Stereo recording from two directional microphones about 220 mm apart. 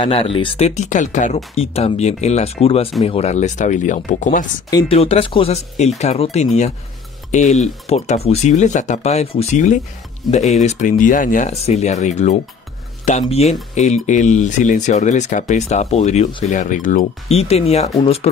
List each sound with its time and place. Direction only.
0.0 s speech: 25° left (ahead or behind)
4.6 s speech: 20° left (ahead or behind)